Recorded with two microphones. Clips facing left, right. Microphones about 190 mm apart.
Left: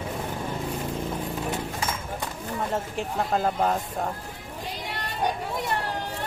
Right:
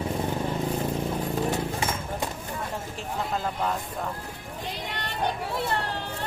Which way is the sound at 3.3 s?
45° left (ahead or behind).